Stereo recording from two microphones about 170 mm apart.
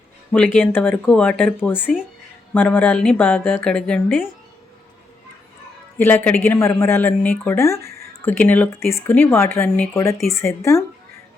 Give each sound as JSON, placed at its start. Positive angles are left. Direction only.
{"t": 0.3, "sound": "a woman's voice", "side_deg": 10}
{"t": 6.0, "sound": "a woman's voice", "side_deg": 10}